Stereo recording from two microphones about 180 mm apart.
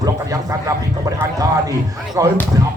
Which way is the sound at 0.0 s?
20° right (ahead or behind).